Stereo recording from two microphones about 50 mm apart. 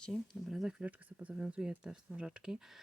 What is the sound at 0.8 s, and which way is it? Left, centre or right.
Speech, right.